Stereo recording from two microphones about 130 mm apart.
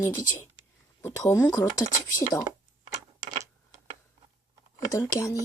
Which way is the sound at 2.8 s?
65° right (ahead or behind).